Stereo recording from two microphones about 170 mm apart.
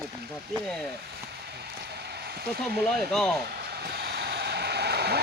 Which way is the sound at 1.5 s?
70° right (ahead or behind).